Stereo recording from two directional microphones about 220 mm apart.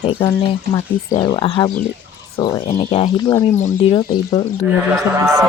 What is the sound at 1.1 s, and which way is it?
Speech, 20° left (ahead or behind).